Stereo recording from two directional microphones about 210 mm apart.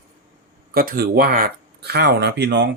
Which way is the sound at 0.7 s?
45° right (ahead or behind).